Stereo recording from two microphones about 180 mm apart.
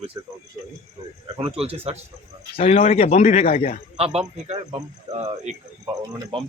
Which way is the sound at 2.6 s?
35° left (ahead or behind).